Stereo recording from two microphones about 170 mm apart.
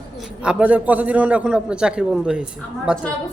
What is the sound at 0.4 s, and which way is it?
A man's voice, 10° right (ahead or behind).